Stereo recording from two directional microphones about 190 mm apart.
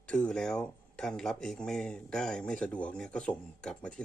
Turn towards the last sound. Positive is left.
turn(degrees=5)  # may be behind; listen again after turning